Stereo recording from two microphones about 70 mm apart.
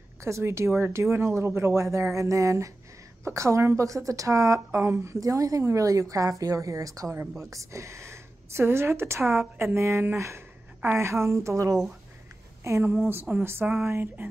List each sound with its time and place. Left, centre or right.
0.2 s a woman's voice: right
13.1 s speech: right